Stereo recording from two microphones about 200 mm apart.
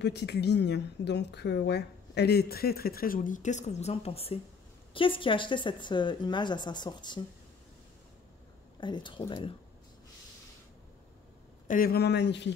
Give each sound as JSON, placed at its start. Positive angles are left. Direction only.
{"t": 0.0, "sound": "a woman's voice", "side_deg": 55}
{"t": 8.7, "sound": "a woman's voice", "side_deg": 25}
{"t": 11.6, "sound": "speech", "side_deg": 45}